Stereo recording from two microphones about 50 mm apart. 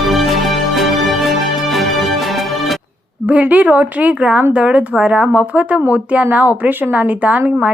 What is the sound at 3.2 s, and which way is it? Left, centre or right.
A woman's voice, right.